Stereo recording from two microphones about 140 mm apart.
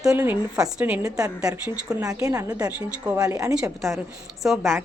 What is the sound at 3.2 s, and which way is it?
Speech, 25° right (ahead or behind).